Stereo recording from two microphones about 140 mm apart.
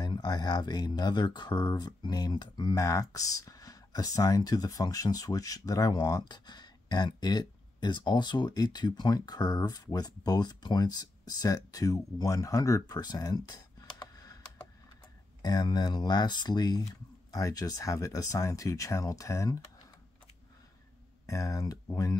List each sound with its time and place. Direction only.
0.0 s speech: 30° left (ahead or behind)
21.3 s speech: 25° left (ahead or behind)